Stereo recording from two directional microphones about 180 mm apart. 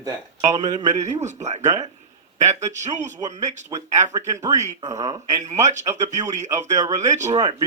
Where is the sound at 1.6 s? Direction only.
20° right (ahead or behind).